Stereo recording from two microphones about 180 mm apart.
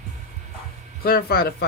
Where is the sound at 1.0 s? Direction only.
60° left (ahead or behind).